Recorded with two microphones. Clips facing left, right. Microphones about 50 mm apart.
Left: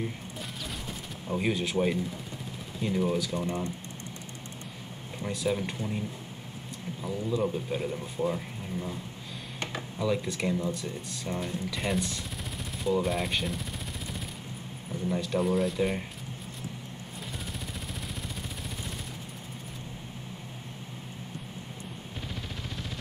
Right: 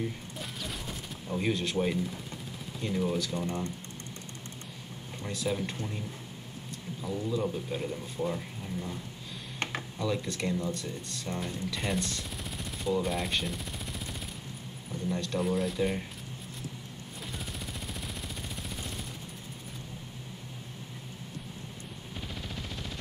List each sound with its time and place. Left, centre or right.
1.3 s speech: centre
3.4 s speech: centre
5.2 s speech: centre
7.1 s speech: centre
9.9 s speech: centre
15.0 s speech: centre